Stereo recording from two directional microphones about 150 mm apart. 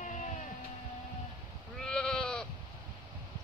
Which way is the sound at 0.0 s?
55° left (ahead or behind).